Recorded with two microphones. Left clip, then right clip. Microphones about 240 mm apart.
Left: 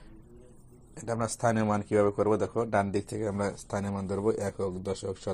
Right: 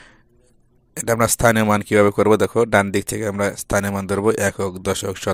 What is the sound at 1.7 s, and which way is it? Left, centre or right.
Speech, right.